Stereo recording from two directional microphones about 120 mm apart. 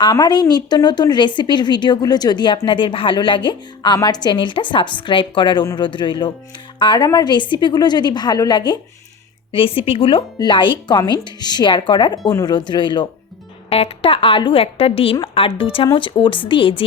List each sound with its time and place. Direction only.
0.0 s a woman's voice: 35° left (ahead or behind)
9.5 s a woman's voice: 50° left (ahead or behind)
13.7 s a woman's voice: 55° left (ahead or behind)